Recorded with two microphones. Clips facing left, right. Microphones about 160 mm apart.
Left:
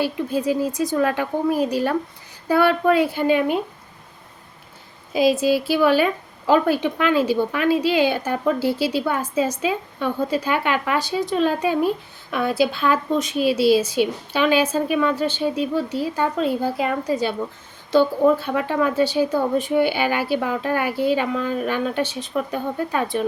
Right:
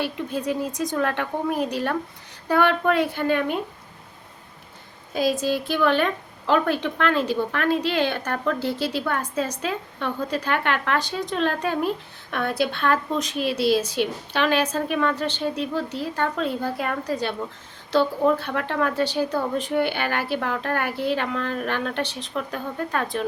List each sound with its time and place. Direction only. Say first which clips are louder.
0.0 s a woman's voice: left 5 dB; centre (ahead or behind)
5.1 s a woman's voice: left 5 dB; 10° left (ahead or behind)